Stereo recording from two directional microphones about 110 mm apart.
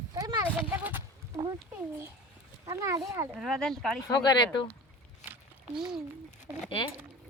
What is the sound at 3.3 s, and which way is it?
Speech, centre (ahead or behind).